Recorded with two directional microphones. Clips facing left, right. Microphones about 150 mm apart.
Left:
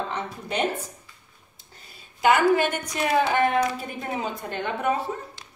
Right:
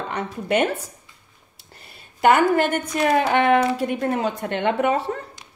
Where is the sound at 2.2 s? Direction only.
55° right (ahead or behind).